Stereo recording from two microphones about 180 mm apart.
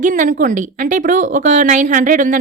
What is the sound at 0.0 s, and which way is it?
A woman's voice, 45° right (ahead or behind).